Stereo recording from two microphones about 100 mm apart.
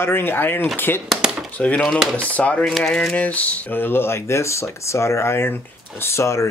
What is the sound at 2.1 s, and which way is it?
Speech, 15° left (ahead or behind).